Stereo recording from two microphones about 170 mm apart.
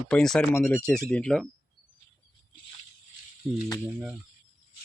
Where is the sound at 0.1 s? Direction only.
5° left (ahead or behind).